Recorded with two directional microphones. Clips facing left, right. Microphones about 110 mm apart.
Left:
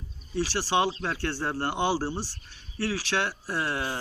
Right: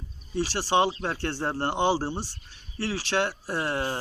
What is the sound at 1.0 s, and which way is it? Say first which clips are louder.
A man's voice: right 1 dB; 25° right (ahead or behind).